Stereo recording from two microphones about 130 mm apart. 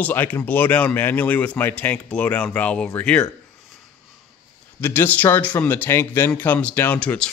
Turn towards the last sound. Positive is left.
turn(degrees=10)  # may be behind; listen again after turning